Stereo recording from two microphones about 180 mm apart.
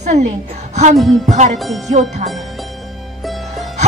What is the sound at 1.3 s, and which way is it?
Speech, 40° right (ahead or behind).